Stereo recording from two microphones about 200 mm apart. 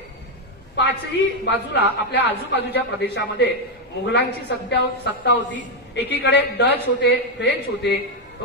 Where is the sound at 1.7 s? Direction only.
55° left (ahead or behind).